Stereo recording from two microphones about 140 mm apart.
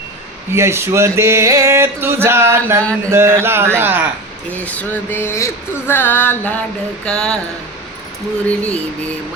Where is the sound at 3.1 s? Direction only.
15° right (ahead or behind).